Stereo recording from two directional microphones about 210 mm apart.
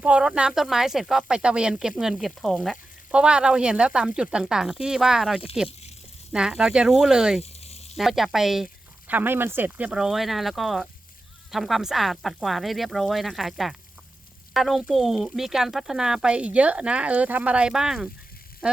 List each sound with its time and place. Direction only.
0.0 s speech: 5° right (ahead or behind)
7.4 s frying: 30° left (ahead or behind)
7.9 s speech: centre (ahead or behind)